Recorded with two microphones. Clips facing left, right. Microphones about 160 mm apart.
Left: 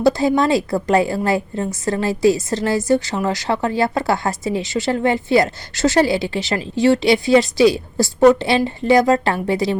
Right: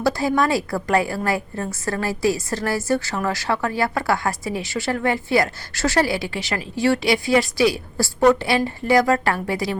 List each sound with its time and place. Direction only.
0.0 s a woman's voice: 20° left (ahead or behind)